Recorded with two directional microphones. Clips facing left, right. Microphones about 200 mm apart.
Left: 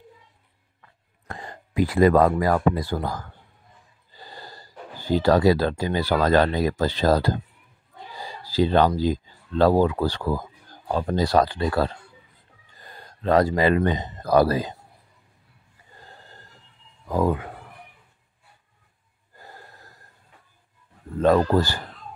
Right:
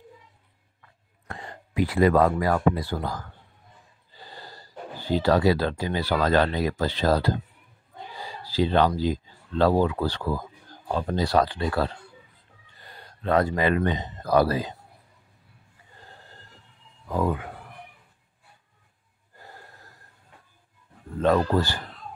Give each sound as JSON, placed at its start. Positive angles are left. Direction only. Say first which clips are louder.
{"t": 1.2, "sound": "speech", "louder": "left 2 dB", "side_deg": 40}
{"t": 4.2, "sound": "gasp", "louder": "left 2 dB", "side_deg": 40}
{"t": 5.0, "sound": "speech", "louder": "left 3 dB", "side_deg": 45}
{"t": 8.5, "sound": "speech", "louder": "left 2 dB", "side_deg": 40}
{"t": 21.2, "sound": "speech", "louder": "left 3 dB", "side_deg": 40}